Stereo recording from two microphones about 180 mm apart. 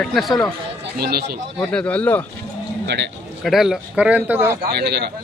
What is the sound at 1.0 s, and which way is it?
Speech, 60° right (ahead or behind).